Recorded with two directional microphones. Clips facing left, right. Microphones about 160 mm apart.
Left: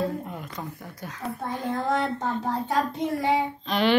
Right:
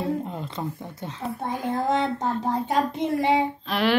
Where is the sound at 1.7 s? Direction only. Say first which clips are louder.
Right 2 dB; 20° right (ahead or behind).